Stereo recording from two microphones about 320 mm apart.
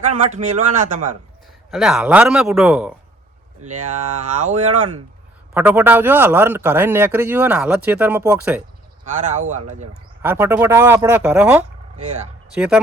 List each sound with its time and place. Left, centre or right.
0.2 s speech: right
1.7 s a man's voice: centre
3.7 s speech: right
5.5 s a man's voice: centre
9.0 s speech: right
10.2 s a man's voice: centre